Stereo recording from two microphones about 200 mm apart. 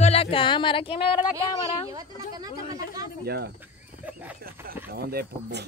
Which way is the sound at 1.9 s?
20° right (ahead or behind).